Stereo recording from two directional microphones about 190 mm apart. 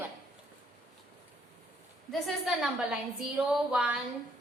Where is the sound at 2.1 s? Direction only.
Centre (ahead or behind).